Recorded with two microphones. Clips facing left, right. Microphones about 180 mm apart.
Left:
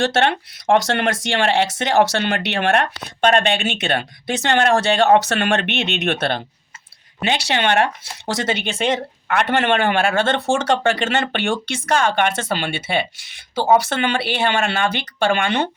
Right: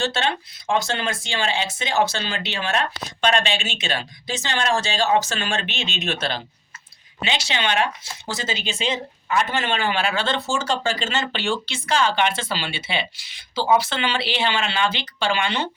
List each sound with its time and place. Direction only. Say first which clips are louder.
0.2 s speech: left 6 dB; 60° left (ahead or behind)